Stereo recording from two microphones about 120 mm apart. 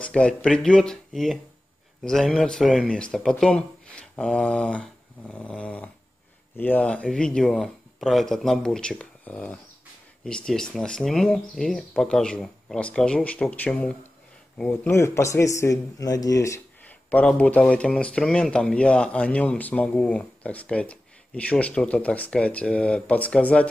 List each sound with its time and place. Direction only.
0.0 s a man's voice: 10° left (ahead or behind); by 16.6 s 25° left (ahead or behind)
16.8 s speech: 10° left (ahead or behind)